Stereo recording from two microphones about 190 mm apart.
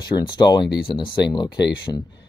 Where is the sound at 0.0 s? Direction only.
20° left (ahead or behind).